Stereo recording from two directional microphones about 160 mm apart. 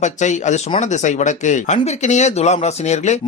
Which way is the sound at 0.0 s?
50° left (ahead or behind).